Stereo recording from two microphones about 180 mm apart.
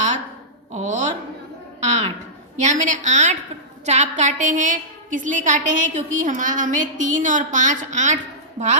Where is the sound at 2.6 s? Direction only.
45° right (ahead or behind).